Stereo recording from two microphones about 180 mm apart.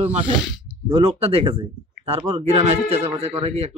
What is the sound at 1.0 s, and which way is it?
Speech, 35° right (ahead or behind).